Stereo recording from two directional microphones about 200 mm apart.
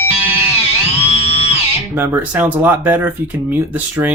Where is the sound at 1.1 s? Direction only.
30° left (ahead or behind).